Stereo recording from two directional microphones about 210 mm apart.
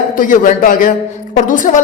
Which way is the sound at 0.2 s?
40° left (ahead or behind).